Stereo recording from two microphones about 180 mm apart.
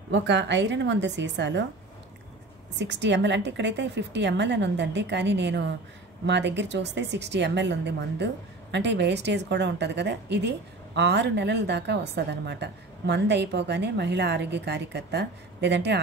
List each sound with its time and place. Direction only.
0.1 s a woman's voice: 70° right (ahead or behind)
2.8 s a woman's voice: 80° right